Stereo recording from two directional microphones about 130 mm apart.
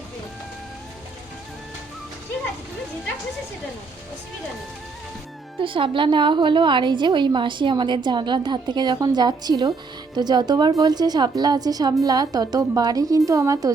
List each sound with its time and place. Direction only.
5.5 s a woman's voice: 40° right (ahead or behind); by 13.7 s 25° right (ahead or behind)